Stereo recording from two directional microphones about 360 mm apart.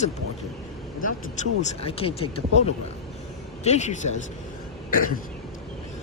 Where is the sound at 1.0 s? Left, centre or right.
Centre.